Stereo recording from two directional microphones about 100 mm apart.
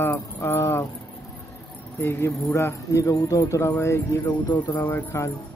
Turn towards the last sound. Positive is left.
turn(degrees=25)  # may be behind; listen again after turning